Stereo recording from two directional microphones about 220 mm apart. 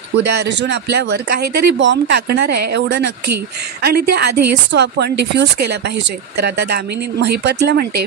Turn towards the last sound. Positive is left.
turn(degrees=-45)  # may be behind; listen again after turning